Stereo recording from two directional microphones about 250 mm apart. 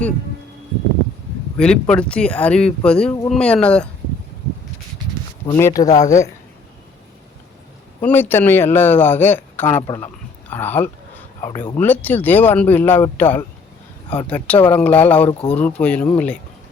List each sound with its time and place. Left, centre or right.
1.5 s speech: centre
5.5 s speech: centre
5.9 s a woman's voice: left
8.0 s speech: centre